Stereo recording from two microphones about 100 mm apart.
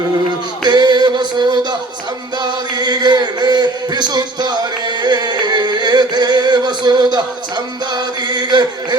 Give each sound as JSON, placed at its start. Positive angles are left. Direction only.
{"t": 0.6, "sound": "music", "side_deg": -45}
{"t": 2.4, "sound": "speech", "side_deg": -45}
{"t": 5.0, "sound": "music", "side_deg": -45}
{"t": 7.9, "sound": "chant", "side_deg": -45}